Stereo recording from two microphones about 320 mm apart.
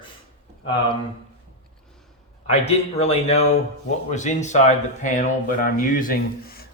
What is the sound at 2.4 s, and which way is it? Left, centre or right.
Speech, centre.